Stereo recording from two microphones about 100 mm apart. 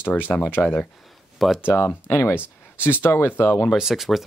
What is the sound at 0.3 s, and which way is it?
Speech, 20° left (ahead or behind).